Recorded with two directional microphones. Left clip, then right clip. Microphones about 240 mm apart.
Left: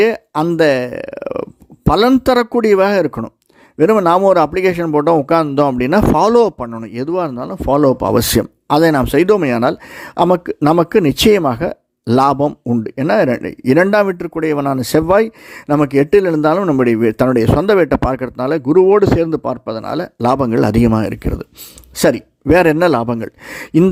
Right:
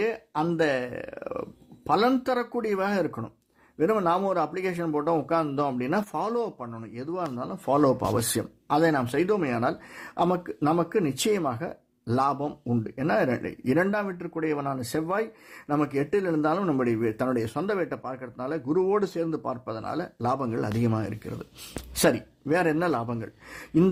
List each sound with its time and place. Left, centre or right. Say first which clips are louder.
0.0 s a man's voice: left 13 dB; left